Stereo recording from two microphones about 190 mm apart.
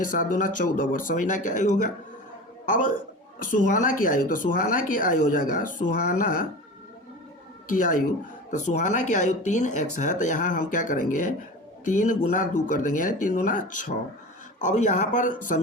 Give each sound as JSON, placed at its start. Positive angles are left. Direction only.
{"t": 0.0, "sound": "a man's voice", "side_deg": 45}
{"t": 7.7, "sound": "speech", "side_deg": 45}